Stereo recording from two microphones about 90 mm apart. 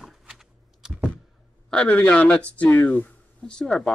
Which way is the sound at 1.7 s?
15° left (ahead or behind).